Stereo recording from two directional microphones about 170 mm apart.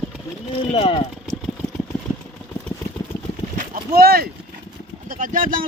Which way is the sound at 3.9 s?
65° right (ahead or behind).